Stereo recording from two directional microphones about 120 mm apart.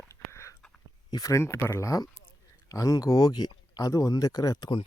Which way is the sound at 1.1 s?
30° left (ahead or behind).